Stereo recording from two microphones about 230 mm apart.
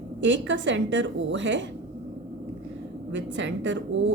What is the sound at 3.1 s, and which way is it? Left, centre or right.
Speech, right.